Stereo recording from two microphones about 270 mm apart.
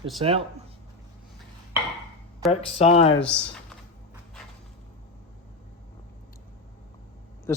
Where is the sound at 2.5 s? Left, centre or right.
Left.